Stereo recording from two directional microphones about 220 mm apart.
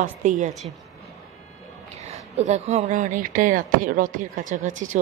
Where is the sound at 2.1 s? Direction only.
30° right (ahead or behind).